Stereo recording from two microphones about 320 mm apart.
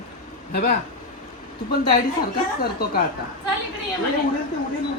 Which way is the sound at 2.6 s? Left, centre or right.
Left.